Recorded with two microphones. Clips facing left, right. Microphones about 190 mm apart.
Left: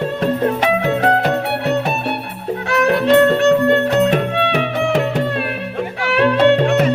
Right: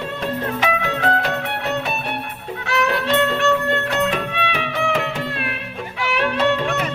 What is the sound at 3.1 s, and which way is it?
Music, 35° left (ahead or behind).